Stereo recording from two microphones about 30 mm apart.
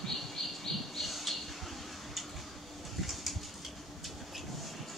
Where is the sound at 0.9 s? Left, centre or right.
Centre.